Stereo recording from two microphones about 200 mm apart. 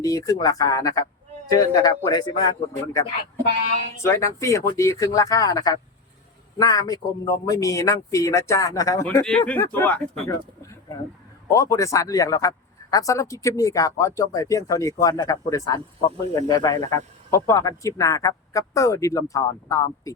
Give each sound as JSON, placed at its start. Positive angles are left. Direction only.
{"t": 0.0, "sound": "a man's voice", "side_deg": 15}
{"t": 4.0, "sound": "a man's voice", "side_deg": 15}